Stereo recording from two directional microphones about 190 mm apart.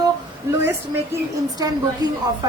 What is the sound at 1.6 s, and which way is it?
Speech, 20° right (ahead or behind).